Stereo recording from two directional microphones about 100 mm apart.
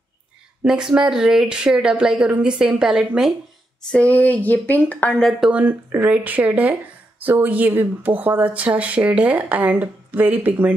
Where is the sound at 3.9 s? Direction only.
15° left (ahead or behind).